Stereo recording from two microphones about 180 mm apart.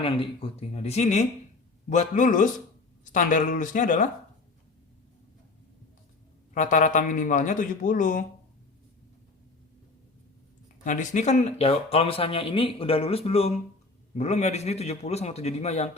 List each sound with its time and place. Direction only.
0.0 s a man's voice: 30° left (ahead or behind)
6.5 s a man's voice: 45° left (ahead or behind)
10.8 s speech: 45° left (ahead or behind)